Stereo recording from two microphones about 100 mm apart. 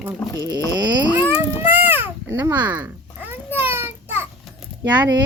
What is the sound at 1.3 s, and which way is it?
Baby cry, 20° right (ahead or behind).